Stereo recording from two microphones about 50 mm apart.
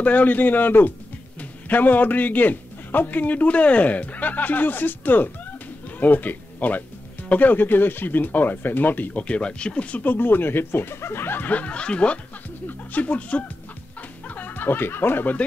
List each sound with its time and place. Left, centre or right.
0.0 s a man's voice: left
10.0 s speech: left
11.4 s speech: left
12.6 s speech: left
14.2 s snicker: left